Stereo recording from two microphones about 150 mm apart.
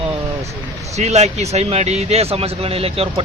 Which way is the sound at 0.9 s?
45° right (ahead or behind).